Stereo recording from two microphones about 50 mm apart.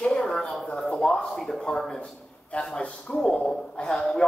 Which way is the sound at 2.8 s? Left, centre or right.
Left.